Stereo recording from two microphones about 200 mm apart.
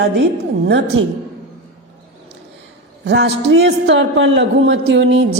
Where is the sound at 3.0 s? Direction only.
60° right (ahead or behind).